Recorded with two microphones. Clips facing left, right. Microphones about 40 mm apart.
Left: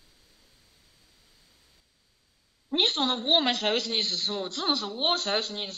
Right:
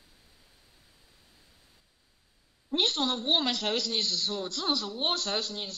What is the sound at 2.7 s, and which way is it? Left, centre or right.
A woman's voice, left.